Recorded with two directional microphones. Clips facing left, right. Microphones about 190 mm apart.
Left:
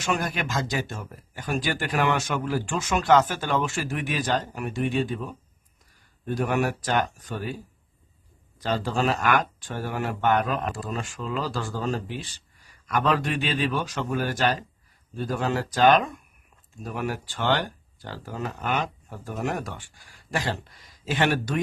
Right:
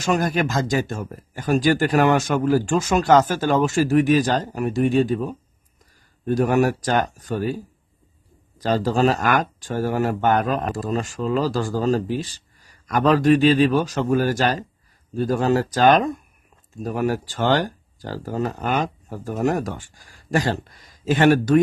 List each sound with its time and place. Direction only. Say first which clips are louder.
0.0 s speech: right 7 dB; 40° right (ahead or behind)
8.5 s speech: right 6 dB; 40° right (ahead or behind)